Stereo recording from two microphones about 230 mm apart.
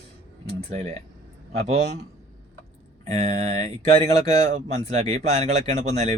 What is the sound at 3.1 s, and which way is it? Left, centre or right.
Speech, right.